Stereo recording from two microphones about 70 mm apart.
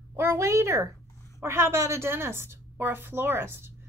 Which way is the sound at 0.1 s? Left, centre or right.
Right.